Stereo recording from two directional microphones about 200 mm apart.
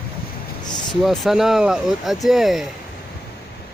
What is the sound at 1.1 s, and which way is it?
Speech, centre (ahead or behind).